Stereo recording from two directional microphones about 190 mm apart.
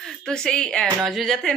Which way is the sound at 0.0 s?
5° left (ahead or behind).